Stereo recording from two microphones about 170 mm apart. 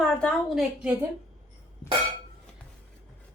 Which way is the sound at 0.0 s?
5° left (ahead or behind).